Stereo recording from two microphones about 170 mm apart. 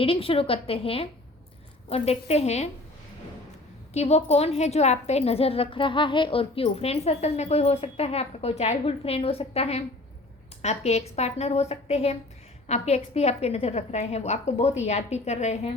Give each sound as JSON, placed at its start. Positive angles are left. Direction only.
{"t": 0.0, "sound": "a woman's voice", "side_deg": 35}
{"t": 3.9, "sound": "a woman's voice", "side_deg": 40}